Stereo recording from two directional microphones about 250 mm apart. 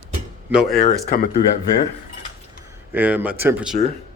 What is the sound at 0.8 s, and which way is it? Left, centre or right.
Speech, left.